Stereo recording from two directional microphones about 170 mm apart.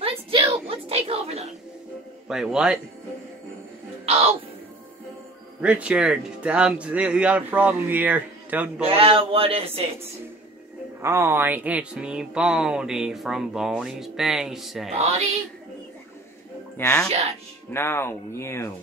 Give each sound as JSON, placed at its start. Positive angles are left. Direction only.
{"t": 0.0, "sound": "a sound", "side_deg": -30}
{"t": 2.2, "sound": "speech", "side_deg": -5}
{"t": 5.6, "sound": "speech", "side_deg": -5}
{"t": 8.8, "sound": "speech", "side_deg": -35}
{"t": 11.0, "sound": "speech", "side_deg": -15}
{"t": 15.0, "sound": "speech", "side_deg": -40}
{"t": 16.7, "sound": "speech", "side_deg": 15}